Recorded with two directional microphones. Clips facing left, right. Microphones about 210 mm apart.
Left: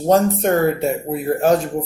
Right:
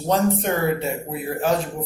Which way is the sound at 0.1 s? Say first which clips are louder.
Left 5 dB; 45° left (ahead or behind).